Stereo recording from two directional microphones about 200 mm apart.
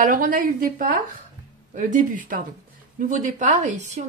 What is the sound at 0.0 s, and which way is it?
A woman's voice, 45° right (ahead or behind).